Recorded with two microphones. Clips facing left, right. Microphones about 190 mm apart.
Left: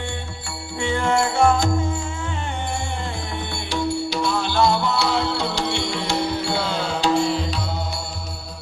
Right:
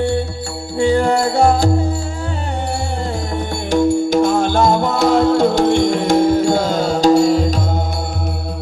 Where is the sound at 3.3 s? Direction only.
45° right (ahead or behind).